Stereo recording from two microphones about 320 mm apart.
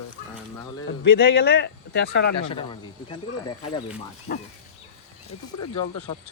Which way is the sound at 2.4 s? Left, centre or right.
Centre.